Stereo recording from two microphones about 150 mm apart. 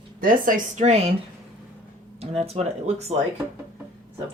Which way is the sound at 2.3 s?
45° right (ahead or behind).